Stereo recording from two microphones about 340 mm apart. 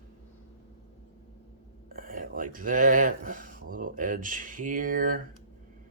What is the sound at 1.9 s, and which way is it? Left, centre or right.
Speech, right.